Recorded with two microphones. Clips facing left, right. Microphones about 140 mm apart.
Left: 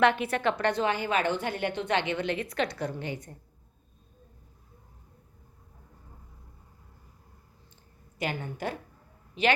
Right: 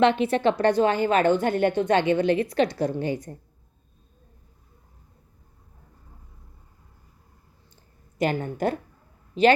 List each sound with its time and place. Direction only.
0.0 s a woman's voice: 25° right (ahead or behind)
8.2 s a woman's voice: 45° right (ahead or behind)